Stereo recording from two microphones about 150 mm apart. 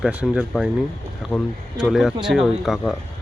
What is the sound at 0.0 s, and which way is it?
Speech, 5° right (ahead or behind).